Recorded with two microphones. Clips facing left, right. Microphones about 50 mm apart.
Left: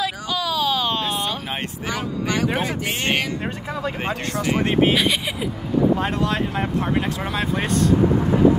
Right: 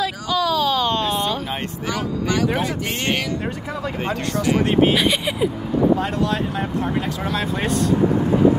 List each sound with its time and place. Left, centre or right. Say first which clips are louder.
0.0 s a sound: right 3 dB; centre
1.9 s speech: right 2 dB; left
4.9 s speech: right 2 dB; centre
5.9 s speech: right 1 dB; left
7.2 s speech: even; centre